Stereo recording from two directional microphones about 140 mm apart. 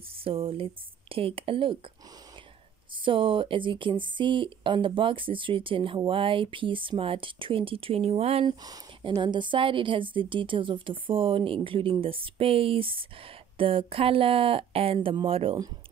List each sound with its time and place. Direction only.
0.2 s speech: 40° right (ahead or behind)
3.1 s speech: 40° right (ahead or behind)
8.5 s speech: 35° right (ahead or behind)